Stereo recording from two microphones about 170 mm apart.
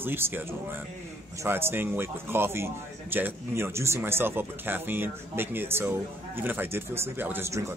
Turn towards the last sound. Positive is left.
turn(degrees=-15)  # may be behind; listen again after turning